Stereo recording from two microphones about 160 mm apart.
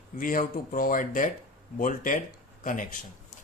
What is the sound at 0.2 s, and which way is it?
Speech, 55° left (ahead or behind).